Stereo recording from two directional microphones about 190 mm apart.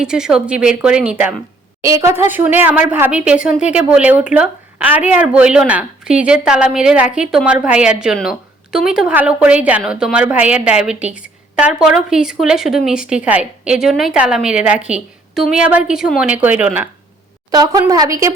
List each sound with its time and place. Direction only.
0.0 s speech: 5° right (ahead or behind)
17.5 s a woman's voice: 20° right (ahead or behind)